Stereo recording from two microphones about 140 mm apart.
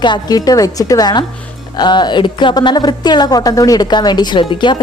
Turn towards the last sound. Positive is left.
turn(degrees=35)  # may be behind; listen again after turning